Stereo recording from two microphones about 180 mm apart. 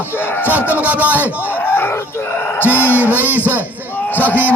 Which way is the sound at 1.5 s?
10° left (ahead or behind).